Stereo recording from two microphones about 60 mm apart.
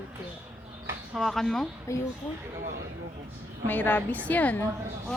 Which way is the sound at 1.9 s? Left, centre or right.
Left.